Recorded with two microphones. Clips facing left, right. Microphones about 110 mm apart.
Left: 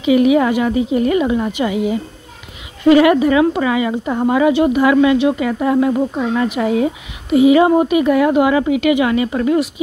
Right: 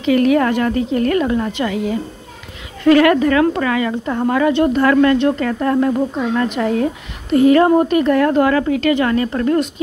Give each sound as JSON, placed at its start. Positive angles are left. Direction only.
{"t": 0.0, "sound": "speech", "side_deg": 10}